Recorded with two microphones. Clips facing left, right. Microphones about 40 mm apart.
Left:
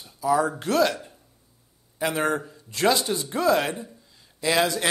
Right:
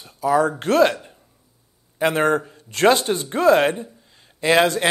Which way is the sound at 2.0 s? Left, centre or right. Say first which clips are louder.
Right 6 dB; right.